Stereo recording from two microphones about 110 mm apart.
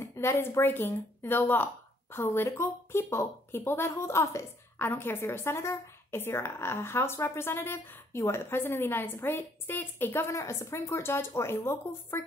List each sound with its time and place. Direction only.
0.0 s a woman's voice: 25° left (ahead or behind)